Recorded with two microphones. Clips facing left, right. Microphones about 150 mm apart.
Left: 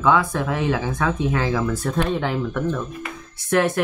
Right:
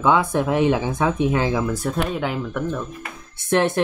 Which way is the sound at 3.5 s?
25° right (ahead or behind).